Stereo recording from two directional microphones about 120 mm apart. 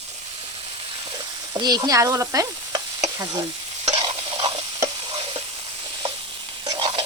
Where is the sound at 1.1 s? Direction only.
35° right (ahead or behind).